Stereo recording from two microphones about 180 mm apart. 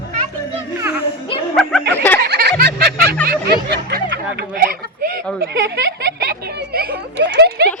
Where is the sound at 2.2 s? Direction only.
60° right (ahead or behind).